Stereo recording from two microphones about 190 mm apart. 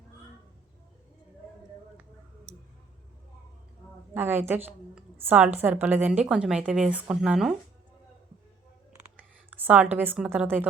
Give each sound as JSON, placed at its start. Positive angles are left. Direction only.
{"t": 2.5, "sound": "tick", "side_deg": -35}
{"t": 4.1, "sound": "a woman's voice", "side_deg": -10}
{"t": 9.1, "sound": "a woman's voice", "side_deg": -10}